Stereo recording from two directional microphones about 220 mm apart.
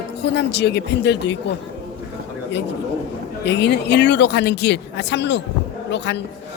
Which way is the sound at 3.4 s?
50° left (ahead or behind).